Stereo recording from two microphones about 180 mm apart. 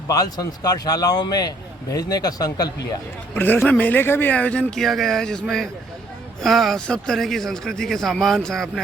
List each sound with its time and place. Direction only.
0.1 s a man's voice: 20° left (ahead or behind)
3.3 s speech: 10° left (ahead or behind)